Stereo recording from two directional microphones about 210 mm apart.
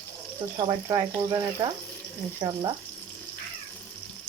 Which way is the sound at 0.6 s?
15° right (ahead or behind).